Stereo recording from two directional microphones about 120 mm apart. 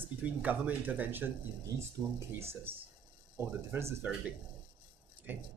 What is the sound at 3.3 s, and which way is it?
Speech, 20° right (ahead or behind).